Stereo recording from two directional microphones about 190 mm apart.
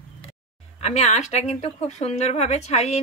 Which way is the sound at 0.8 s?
35° left (ahead or behind).